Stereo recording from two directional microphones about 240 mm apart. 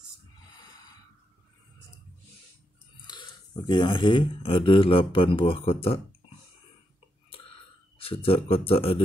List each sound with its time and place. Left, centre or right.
3.1 s speech: centre
8.0 s speech: left